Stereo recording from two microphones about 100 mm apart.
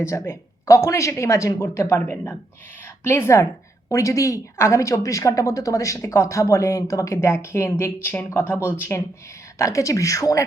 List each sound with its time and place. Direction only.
0.0 s speech: 30° left (ahead or behind)
2.0 s a woman's voice: 15° left (ahead or behind)
9.6 s a woman's voice: 30° left (ahead or behind)